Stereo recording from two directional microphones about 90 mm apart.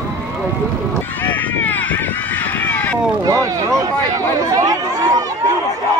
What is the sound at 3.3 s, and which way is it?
Speech, 40° right (ahead or behind).